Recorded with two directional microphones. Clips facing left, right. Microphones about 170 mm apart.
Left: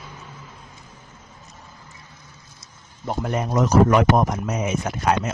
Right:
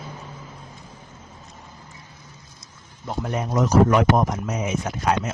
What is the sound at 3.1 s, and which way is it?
Speech, 60° left (ahead or behind).